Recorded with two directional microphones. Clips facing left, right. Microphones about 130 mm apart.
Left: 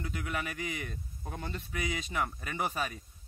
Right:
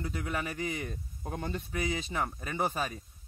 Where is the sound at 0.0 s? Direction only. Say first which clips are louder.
Right 2 dB; 35° right (ahead or behind).